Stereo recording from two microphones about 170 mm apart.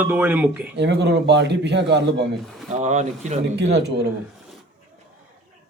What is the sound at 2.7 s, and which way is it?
Speech, 40° right (ahead or behind).